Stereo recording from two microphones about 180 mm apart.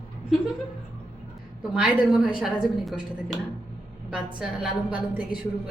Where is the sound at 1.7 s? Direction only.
5° right (ahead or behind).